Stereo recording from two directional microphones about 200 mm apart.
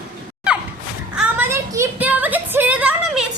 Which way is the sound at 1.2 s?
10° right (ahead or behind).